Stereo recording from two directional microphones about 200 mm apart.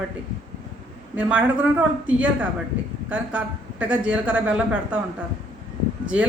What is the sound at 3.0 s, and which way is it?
A woman's voice, 5° right (ahead or behind).